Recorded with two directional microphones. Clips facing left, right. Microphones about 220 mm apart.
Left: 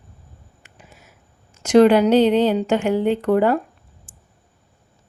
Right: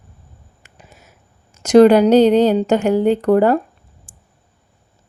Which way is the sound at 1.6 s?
40° right (ahead or behind).